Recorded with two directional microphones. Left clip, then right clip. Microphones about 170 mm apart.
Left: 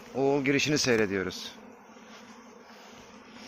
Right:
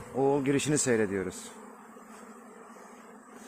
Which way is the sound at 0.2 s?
20° right (ahead or behind).